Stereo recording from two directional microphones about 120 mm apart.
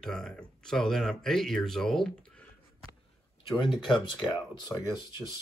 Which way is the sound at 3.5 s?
40° left (ahead or behind).